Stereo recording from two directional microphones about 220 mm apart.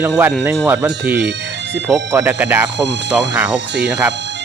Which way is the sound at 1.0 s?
50° right (ahead or behind).